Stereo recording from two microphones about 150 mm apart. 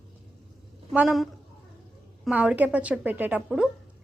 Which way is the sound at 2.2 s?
10° right (ahead or behind).